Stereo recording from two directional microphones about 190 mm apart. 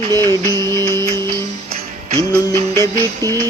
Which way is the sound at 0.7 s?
15° left (ahead or behind).